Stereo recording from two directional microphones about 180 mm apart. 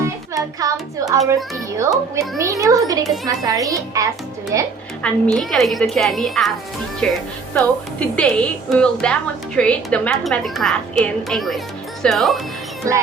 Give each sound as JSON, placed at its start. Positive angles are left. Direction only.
{"t": 0.0, "sound": "a child's voice", "side_deg": -20}
{"t": 2.4, "sound": "a child's voice", "side_deg": -15}
{"t": 5.0, "sound": "a woman's voice", "side_deg": 5}